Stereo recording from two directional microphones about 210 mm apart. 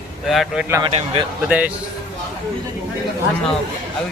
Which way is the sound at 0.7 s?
15° right (ahead or behind).